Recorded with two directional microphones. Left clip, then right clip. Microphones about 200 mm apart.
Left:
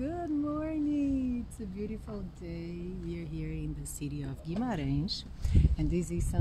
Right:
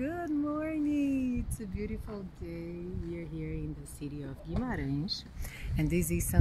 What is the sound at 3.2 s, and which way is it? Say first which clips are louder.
Speech: right 1 dB; 60° left (ahead or behind).